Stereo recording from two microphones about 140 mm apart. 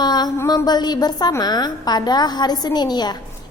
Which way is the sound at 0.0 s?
30° left (ahead or behind).